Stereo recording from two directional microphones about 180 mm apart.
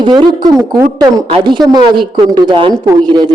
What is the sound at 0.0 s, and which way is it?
A woman's voice, 25° right (ahead or behind).